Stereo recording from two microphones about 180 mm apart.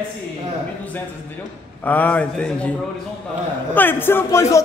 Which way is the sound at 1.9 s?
10° left (ahead or behind).